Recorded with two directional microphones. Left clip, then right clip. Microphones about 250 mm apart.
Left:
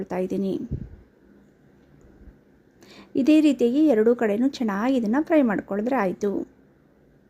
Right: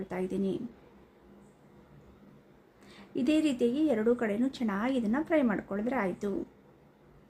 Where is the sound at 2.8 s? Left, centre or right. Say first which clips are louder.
Left 9 dB; left.